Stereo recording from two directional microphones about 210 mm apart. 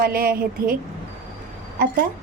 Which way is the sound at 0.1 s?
45° right (ahead or behind).